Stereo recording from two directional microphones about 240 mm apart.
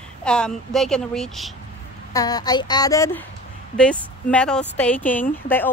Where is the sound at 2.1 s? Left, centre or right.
Centre.